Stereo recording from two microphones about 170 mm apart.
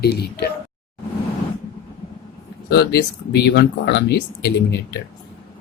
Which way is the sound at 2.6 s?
70° left (ahead or behind).